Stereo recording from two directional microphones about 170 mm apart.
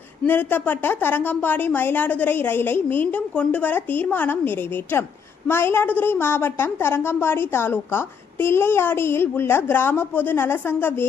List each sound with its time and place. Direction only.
0.3 s a woman's voice: 10° left (ahead or behind)